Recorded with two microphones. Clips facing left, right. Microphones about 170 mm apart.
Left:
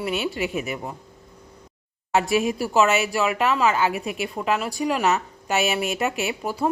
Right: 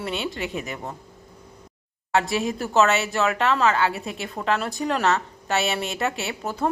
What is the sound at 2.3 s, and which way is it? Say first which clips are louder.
A woman's voice: left 2 dB; 15° left (ahead or behind).